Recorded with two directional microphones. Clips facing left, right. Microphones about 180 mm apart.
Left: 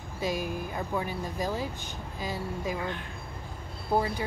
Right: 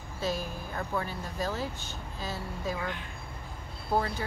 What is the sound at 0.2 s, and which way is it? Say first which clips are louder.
Speech: left 2 dB; 15° left (ahead or behind).